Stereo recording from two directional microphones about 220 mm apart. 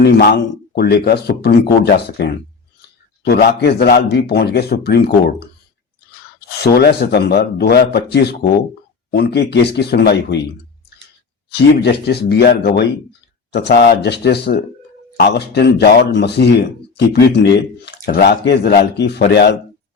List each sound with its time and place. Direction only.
0.7 s speech: 45° left (ahead or behind)
11.7 s speech: 50° left (ahead or behind)